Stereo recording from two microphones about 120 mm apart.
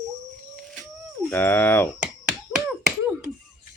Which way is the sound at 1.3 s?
20° left (ahead or behind).